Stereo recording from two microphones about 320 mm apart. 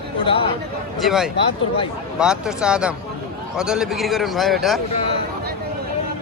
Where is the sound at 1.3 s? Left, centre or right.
Centre.